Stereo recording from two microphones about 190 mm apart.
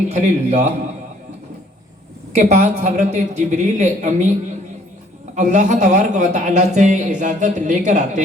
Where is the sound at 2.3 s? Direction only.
40° right (ahead or behind).